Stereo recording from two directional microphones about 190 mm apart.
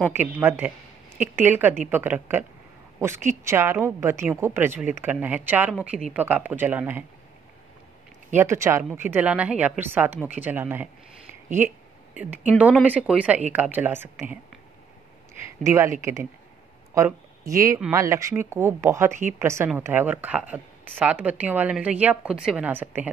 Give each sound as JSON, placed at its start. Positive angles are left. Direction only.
{"t": 0.1, "sound": "a woman's voice", "side_deg": -10}
{"t": 3.4, "sound": "a woman's voice", "side_deg": -10}
{"t": 8.4, "sound": "a woman's voice", "side_deg": -15}
{"t": 15.6, "sound": "a woman's voice", "side_deg": -15}
{"t": 17.5, "sound": "a woman's voice", "side_deg": -15}